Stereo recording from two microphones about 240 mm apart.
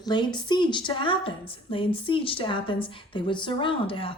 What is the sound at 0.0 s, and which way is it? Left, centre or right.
A woman's voice, centre.